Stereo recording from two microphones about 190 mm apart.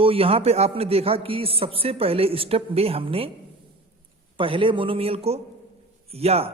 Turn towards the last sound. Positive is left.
turn(degrees=-30)  # may be behind; listen again after turning